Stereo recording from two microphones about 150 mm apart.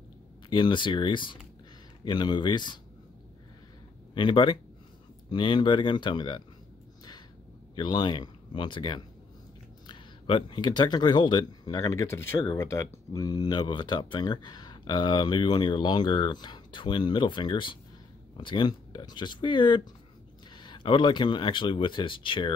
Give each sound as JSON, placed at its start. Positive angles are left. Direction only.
{"t": 0.5, "sound": "speech", "side_deg": 30}
{"t": 4.1, "sound": "speech", "side_deg": 35}
{"t": 7.7, "sound": "speech", "side_deg": 30}